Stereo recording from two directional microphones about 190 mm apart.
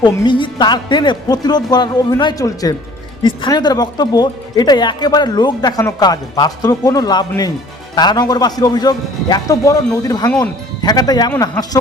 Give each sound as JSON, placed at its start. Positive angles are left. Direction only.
{"t": 0.0, "sound": "speech", "side_deg": 25}